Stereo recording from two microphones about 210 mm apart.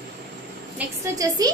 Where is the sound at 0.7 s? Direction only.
15° right (ahead or behind).